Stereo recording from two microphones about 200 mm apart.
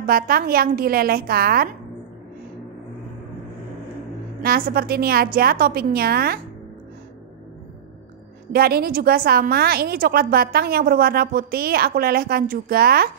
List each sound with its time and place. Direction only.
0.0 s a woman's voice: 45° right (ahead or behind)
4.4 s a woman's voice: 50° right (ahead or behind)
8.5 s a woman's voice: 50° right (ahead or behind)